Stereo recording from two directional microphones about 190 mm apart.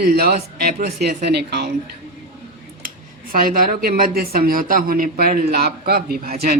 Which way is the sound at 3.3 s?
45° right (ahead or behind).